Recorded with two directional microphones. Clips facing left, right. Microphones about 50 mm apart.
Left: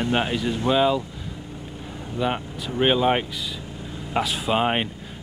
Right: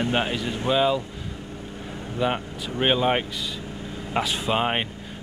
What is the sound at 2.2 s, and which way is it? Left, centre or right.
Speech, centre.